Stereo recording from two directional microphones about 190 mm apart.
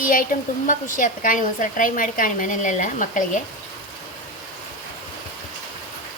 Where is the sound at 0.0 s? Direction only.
45° left (ahead or behind).